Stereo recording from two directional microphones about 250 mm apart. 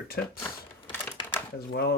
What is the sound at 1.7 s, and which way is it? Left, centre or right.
Speech, left.